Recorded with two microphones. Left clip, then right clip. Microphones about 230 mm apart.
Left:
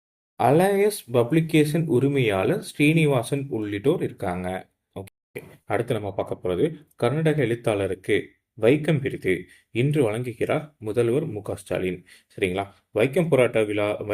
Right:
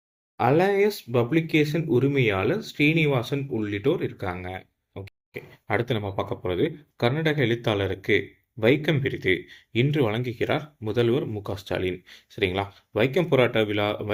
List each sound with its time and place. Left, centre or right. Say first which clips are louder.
0.3 s speech: left 2 dB; centre